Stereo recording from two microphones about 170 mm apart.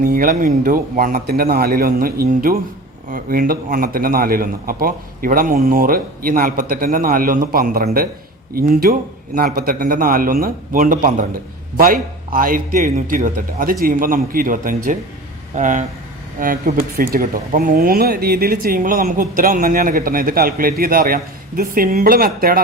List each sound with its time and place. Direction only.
0.0 s speech: 55° right (ahead or behind)